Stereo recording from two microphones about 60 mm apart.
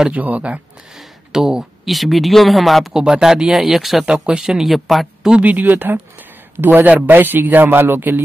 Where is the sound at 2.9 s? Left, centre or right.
Centre.